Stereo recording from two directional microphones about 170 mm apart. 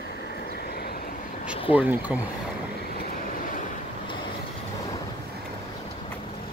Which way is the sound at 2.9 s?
60° left (ahead or behind).